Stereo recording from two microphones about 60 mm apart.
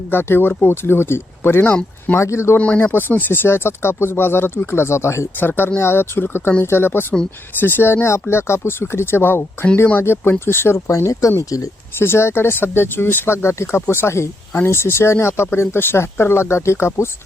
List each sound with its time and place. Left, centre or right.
0.1 s speech: left
2.7 s speech: left
5.4 s speech: left
11.9 s speech: left